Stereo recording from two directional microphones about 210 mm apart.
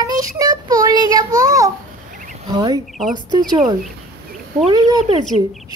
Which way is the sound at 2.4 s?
20° right (ahead or behind).